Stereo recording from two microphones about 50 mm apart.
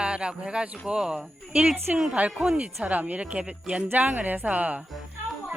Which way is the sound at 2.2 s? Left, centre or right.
Right.